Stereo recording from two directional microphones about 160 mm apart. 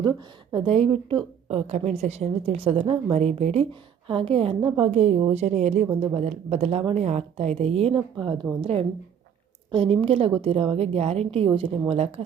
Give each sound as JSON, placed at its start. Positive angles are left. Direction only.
{"t": 0.5, "sound": "a woman's voice", "side_deg": -35}